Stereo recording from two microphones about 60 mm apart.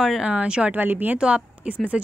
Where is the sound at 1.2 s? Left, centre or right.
Centre.